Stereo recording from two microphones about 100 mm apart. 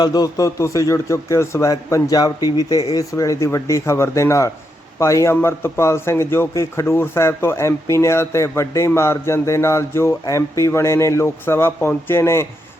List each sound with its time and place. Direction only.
0.0 s speech: 40° left (ahead or behind)
1.7 s a man's voice: 40° left (ahead or behind)